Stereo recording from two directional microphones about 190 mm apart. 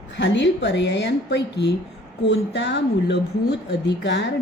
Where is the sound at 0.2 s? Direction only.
70° left (ahead or behind).